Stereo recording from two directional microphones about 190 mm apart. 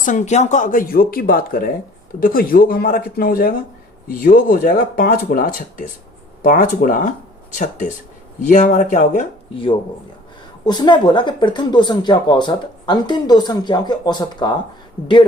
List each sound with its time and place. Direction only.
0.0 s speech: 40° left (ahead or behind)
8.4 s speech: 40° left (ahead or behind)
10.7 s speech: 25° left (ahead or behind)